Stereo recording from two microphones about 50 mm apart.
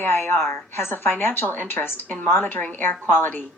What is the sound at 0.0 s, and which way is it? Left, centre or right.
A woman's voice, left.